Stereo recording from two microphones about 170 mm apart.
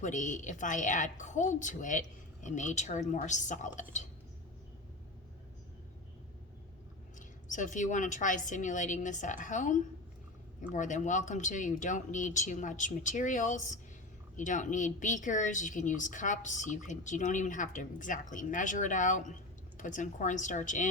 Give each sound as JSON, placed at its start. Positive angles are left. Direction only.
{"t": 0.0, "sound": "a woman's voice", "side_deg": 45}
{"t": 7.2, "sound": "a woman's voice", "side_deg": 45}